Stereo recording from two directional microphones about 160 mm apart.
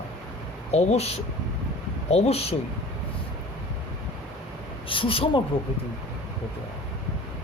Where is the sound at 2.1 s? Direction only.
40° left (ahead or behind).